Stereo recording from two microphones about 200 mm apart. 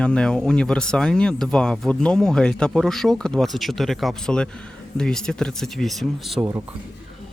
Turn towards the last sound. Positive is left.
turn(degrees=0)  # may be behind; listen again after turning